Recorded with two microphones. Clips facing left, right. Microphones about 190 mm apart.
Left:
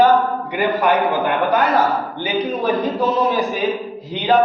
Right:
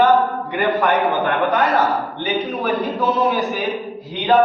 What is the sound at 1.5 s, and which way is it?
A man's voice, 20° left (ahead or behind).